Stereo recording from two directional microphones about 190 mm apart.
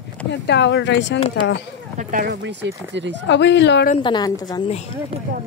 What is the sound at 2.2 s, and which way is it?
Speech, 65° right (ahead or behind).